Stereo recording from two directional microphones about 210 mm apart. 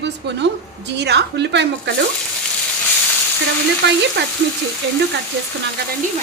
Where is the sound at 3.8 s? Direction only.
55° right (ahead or behind).